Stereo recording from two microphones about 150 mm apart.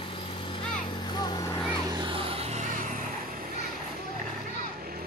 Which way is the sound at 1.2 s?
25° left (ahead or behind).